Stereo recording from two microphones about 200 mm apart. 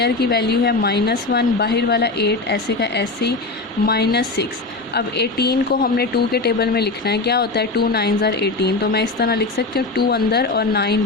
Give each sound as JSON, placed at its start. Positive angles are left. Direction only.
{"t": 0.0, "sound": "a woman's voice", "side_deg": 50}